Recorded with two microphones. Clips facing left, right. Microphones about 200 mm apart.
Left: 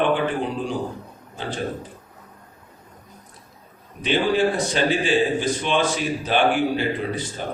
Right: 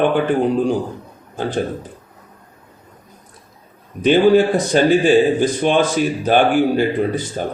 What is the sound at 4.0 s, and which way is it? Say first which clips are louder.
A man's voice: right 8 dB; 45° right (ahead or behind).